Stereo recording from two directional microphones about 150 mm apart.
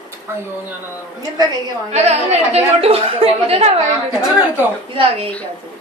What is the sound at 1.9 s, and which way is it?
A woman's voice, 45° right (ahead or behind).